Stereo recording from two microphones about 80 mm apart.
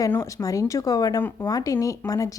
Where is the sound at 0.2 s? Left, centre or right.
Left.